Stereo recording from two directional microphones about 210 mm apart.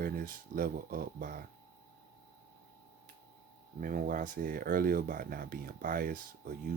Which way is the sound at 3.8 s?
40° right (ahead or behind).